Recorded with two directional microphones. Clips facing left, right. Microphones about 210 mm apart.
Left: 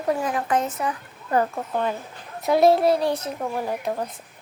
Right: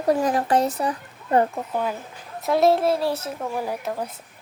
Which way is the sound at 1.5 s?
5° right (ahead or behind).